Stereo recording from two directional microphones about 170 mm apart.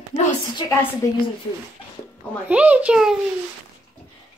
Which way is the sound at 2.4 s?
10° right (ahead or behind).